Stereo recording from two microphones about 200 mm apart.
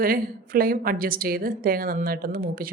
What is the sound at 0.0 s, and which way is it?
A woman's voice, 45° right (ahead or behind).